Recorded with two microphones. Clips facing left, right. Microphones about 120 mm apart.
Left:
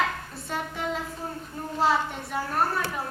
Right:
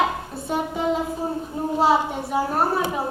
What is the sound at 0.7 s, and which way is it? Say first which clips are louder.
A child's voice: right 8 dB; 20° right (ahead or behind).